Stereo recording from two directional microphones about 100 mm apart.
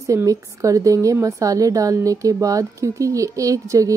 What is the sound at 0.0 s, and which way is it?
A woman's voice, 35° right (ahead or behind).